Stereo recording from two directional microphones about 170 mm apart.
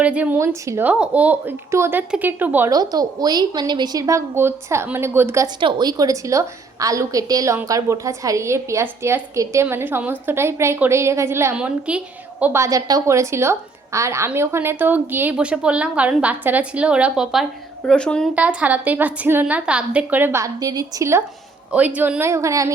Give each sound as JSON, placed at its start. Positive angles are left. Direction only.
{"t": 0.0, "sound": "a woman's voice", "side_deg": -10}
{"t": 2.7, "sound": "a woman's voice", "side_deg": -25}
{"t": 5.5, "sound": "a woman's voice", "side_deg": -25}
{"t": 18.3, "sound": "a woman's voice", "side_deg": -10}